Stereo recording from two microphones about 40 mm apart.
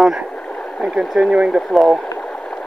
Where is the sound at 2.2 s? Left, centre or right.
Centre.